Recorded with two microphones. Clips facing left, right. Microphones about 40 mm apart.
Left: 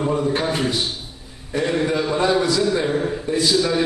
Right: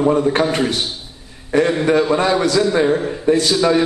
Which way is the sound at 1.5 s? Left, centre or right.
Right.